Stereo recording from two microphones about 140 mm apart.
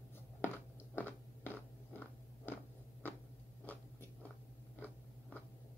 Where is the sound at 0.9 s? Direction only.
15° left (ahead or behind).